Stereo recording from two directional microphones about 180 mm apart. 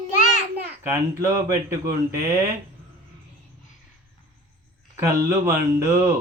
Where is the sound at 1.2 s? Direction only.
15° right (ahead or behind).